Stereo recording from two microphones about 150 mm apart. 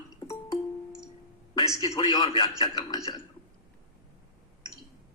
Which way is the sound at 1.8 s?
25° left (ahead or behind).